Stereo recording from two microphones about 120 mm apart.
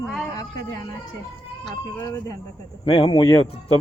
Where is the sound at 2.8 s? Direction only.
50° left (ahead or behind).